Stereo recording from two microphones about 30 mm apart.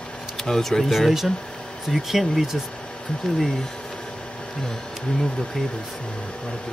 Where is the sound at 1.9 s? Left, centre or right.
Centre.